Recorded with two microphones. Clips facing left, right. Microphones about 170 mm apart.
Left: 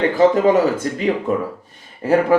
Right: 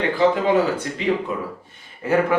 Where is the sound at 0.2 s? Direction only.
40° left (ahead or behind).